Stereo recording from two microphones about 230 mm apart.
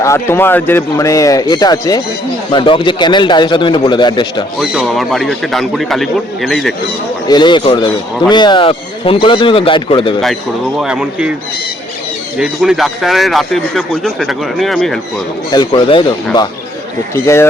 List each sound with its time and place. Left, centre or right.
0.0 s a man's voice: centre
4.6 s speech: centre
7.3 s a man's voice: centre
10.8 s speech: centre
12.4 s speech: centre
15.4 s a man's voice: centre